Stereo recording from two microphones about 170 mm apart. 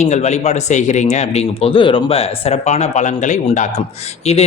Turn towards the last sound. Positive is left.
turn(degrees=40)  # may be behind; listen again after turning